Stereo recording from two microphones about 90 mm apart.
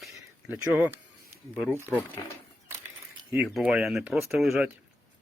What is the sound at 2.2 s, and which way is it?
Speech, 55° left (ahead or behind).